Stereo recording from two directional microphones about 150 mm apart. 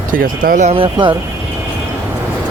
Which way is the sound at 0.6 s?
35° right (ahead or behind).